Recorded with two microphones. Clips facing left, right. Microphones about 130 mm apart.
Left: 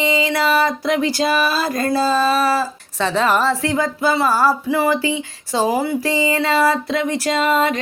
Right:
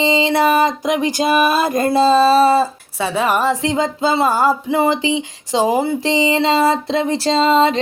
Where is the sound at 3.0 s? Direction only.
10° right (ahead or behind).